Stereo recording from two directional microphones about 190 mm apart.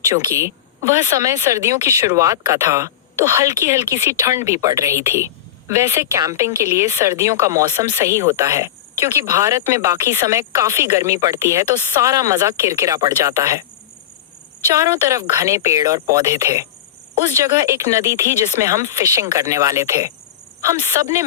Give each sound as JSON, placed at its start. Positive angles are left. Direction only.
{"t": 0.1, "sound": "speech", "side_deg": -15}
{"t": 14.7, "sound": "speech", "side_deg": -15}